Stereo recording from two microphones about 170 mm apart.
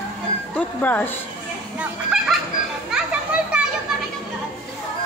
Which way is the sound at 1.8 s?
5° right (ahead or behind).